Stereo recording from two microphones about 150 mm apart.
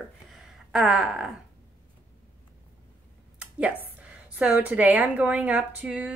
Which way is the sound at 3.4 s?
10° right (ahead or behind).